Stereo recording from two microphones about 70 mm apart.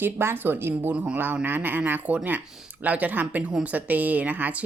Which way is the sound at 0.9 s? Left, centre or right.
Centre.